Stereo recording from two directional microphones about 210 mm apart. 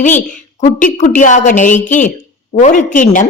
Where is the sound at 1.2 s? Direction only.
35° left (ahead or behind).